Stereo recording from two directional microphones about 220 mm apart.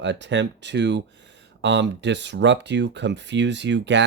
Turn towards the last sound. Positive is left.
turn(degrees=-55)  # may be behind; listen again after turning